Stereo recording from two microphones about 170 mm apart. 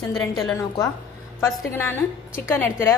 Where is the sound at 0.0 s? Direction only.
20° left (ahead or behind).